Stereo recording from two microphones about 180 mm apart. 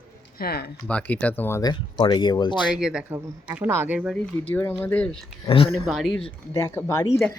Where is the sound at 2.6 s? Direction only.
5° right (ahead or behind).